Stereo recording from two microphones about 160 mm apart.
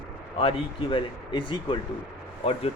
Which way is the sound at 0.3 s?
35° left (ahead or behind).